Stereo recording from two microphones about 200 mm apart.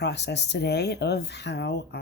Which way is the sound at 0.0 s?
60° left (ahead or behind).